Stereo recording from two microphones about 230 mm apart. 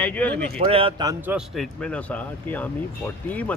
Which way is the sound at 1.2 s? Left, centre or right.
Centre.